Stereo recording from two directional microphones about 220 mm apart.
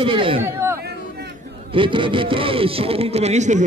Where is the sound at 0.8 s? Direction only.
45° right (ahead or behind).